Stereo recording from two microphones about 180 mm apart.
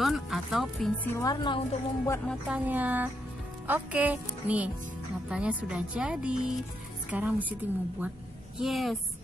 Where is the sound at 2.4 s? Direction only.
5° right (ahead or behind).